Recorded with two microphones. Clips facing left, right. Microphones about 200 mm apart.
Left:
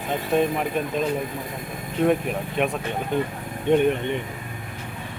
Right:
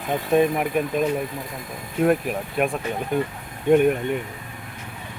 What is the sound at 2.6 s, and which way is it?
Speech, 5° right (ahead or behind).